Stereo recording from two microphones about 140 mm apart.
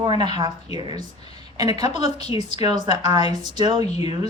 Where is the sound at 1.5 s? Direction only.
30° right (ahead or behind).